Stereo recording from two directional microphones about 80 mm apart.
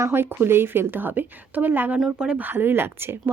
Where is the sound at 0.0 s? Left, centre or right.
Right.